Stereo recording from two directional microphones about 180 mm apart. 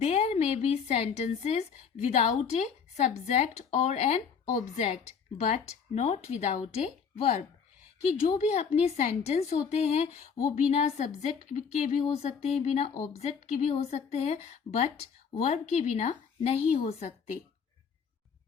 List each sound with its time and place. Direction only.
0.0 s a woman's voice: 35° left (ahead or behind)